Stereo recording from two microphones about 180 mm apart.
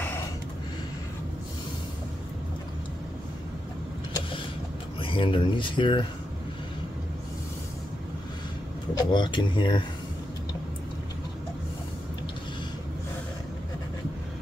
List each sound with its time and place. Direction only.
5.0 s speech: 30° left (ahead or behind)
8.9 s speech: 25° left (ahead or behind)